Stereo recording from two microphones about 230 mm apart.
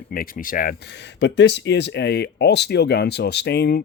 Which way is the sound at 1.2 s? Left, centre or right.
Left.